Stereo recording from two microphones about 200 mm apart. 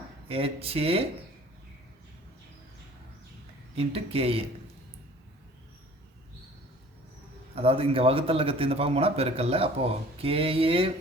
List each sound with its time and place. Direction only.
0.3 s a man's voice: 30° right (ahead or behind)
3.8 s a man's voice: 30° right (ahead or behind)
7.5 s a man's voice: 30° right (ahead or behind)